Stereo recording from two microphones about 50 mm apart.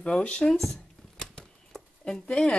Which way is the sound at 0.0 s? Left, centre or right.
Left.